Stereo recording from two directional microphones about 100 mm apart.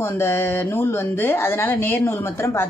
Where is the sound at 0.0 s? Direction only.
20° left (ahead or behind).